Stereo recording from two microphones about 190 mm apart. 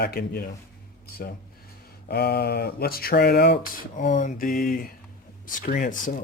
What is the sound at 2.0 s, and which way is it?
Speech, 55° left (ahead or behind).